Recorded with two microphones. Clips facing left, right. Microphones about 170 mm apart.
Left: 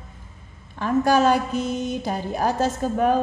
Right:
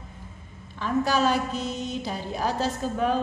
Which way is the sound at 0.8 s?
50° left (ahead or behind).